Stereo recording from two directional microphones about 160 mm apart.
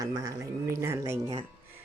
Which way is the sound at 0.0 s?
20° right (ahead or behind).